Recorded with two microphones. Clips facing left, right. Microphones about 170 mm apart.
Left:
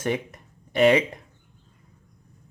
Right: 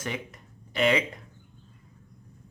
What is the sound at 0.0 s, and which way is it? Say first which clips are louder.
Speech: left 8 dB; 50° left (ahead or behind).